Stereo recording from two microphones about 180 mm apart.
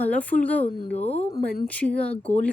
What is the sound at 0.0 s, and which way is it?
Speech, 10° left (ahead or behind).